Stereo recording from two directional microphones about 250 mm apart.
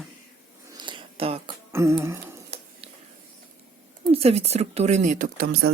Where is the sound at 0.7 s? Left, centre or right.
Centre.